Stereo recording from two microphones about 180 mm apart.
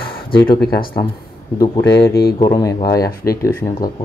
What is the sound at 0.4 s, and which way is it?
Speech, 60° left (ahead or behind).